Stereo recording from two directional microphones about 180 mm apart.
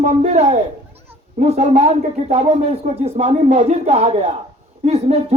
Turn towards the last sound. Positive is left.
turn(degrees=-35)  # may be behind; listen again after turning